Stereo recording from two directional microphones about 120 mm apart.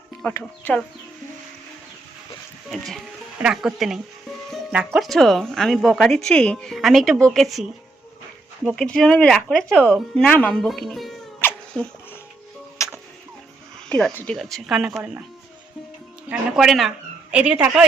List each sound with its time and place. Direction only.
0.3 s speech: 15° left (ahead or behind)
2.6 s a woman's voice: centre (ahead or behind)
8.7 s a woman's voice: 5° left (ahead or behind)
11.3 s music: 15° left (ahead or behind)
12.8 s music: 25° left (ahead or behind)
13.9 s a woman's voice: 10° left (ahead or behind); by 15.2 s 5° right (ahead or behind)
16.3 s a woman's voice: centre (ahead or behind)